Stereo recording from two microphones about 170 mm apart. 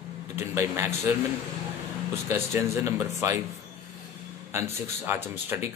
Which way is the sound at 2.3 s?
15° right (ahead or behind).